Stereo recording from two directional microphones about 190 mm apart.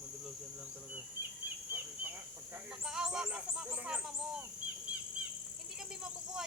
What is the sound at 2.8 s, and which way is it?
Speech, 5° right (ahead or behind).